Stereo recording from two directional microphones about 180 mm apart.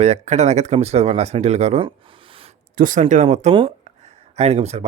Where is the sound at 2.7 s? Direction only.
50° right (ahead or behind).